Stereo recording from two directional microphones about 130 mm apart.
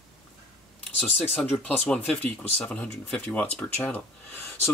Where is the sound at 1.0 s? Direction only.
10° left (ahead or behind).